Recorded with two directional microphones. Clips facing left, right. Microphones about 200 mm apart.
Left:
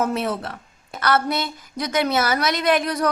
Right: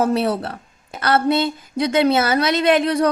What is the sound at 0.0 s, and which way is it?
Speech, 35° right (ahead or behind).